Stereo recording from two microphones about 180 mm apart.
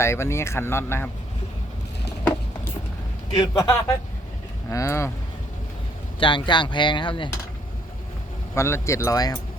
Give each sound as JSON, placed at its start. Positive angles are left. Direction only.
{"t": 0.0, "sound": "speech", "side_deg": 15}
{"t": 3.3, "sound": "speech", "side_deg": 20}
{"t": 6.1, "sound": "speech", "side_deg": 25}
{"t": 8.5, "sound": "speech", "side_deg": 15}